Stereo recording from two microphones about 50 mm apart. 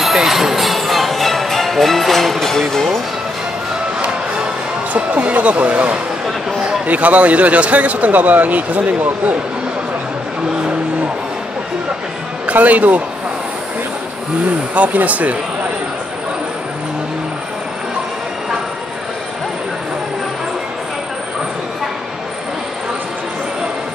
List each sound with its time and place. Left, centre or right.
0.0 s music: centre
4.9 s a man's voice: right
12.4 s a man's voice: right
14.7 s speech: right